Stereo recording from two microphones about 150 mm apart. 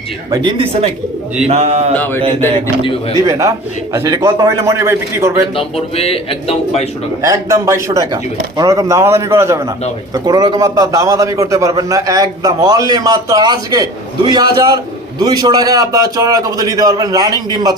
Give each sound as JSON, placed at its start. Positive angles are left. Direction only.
{"t": 0.3, "sound": "a man's voice", "side_deg": -25}
{"t": 1.5, "sound": "speech", "side_deg": -45}
{"t": 3.2, "sound": "a man's voice", "side_deg": -20}
{"t": 5.5, "sound": "speech", "side_deg": 40}
{"t": 7.2, "sound": "a man's voice", "side_deg": -20}